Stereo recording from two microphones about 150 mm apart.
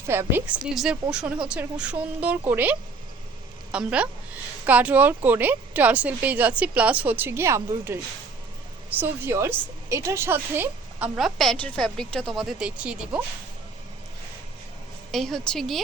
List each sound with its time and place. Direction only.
0.1 s a woman's voice: 15° right (ahead or behind)
11.2 s a woman's voice: centre (ahead or behind)
15.1 s a woman's voice: centre (ahead or behind)